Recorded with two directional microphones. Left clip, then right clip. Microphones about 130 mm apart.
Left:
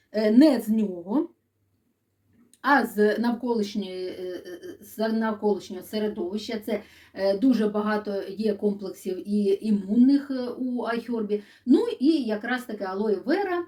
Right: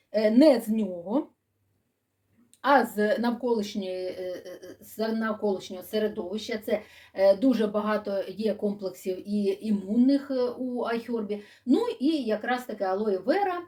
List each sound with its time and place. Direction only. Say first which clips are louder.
0.1 s speech: even; 25° right (ahead or behind)
2.6 s speech: left 1 dB; 25° right (ahead or behind)